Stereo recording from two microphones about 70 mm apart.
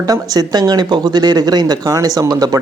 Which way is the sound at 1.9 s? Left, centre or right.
Right.